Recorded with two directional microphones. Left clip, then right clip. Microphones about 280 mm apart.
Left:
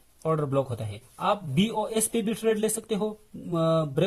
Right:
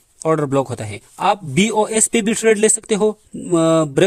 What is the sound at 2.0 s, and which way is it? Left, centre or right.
A man's voice, right.